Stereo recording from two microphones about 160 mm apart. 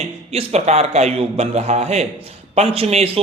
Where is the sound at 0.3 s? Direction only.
40° right (ahead or behind).